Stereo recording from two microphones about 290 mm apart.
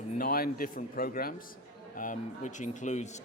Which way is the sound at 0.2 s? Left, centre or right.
Left.